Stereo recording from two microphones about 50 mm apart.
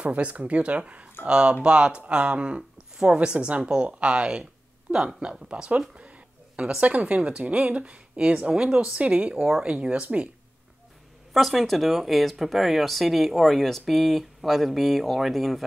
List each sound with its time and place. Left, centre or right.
0.0 s speech: right
5.5 s a sound: right
6.8 s speech: right
8.4 s speech: centre
11.3 s speech: centre